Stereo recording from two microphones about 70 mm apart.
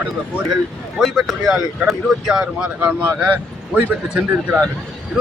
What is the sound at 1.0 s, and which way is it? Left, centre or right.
Speech, centre.